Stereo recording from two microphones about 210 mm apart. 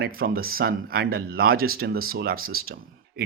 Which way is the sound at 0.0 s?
45° right (ahead or behind).